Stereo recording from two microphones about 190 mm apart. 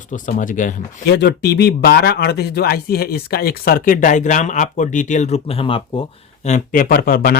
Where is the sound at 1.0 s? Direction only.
60° left (ahead or behind).